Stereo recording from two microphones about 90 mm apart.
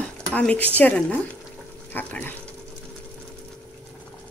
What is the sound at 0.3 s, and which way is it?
Speech, 15° left (ahead or behind).